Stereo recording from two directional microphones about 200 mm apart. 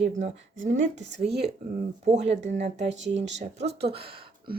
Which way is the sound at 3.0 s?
65° right (ahead or behind).